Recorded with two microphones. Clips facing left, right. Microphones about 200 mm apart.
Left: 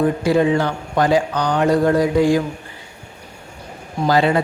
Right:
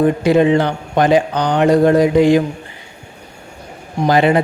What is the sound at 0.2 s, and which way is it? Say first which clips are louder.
Speech: right 4 dB; 20° right (ahead or behind).